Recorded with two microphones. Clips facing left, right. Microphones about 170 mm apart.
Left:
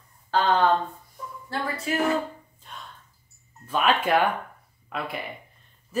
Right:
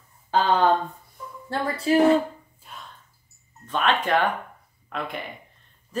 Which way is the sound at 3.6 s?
10° left (ahead or behind).